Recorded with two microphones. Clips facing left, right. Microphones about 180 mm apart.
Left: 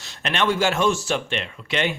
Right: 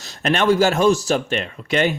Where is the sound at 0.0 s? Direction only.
40° right (ahead or behind).